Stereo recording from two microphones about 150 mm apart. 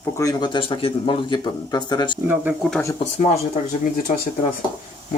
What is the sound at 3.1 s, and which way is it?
Speech, 50° left (ahead or behind).